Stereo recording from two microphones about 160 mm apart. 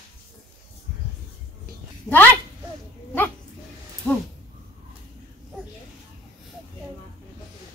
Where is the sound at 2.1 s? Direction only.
15° right (ahead or behind).